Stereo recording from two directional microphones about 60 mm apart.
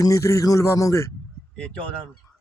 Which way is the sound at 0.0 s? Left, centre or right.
Left.